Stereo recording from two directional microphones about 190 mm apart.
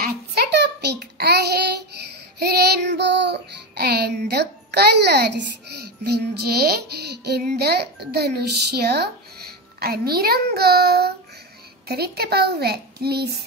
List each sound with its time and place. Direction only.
0.0 s a sound: 55° right (ahead or behind)
2.3 s child singing: 55° right (ahead or behind)
7.2 s a child's voice: 55° right (ahead or behind)